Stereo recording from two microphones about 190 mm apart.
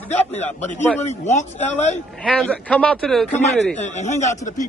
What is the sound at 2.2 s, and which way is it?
A man's voice, 5° left (ahead or behind).